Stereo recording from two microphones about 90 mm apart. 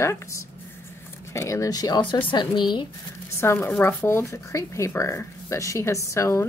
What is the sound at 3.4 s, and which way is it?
A woman's voice, 25° left (ahead or behind).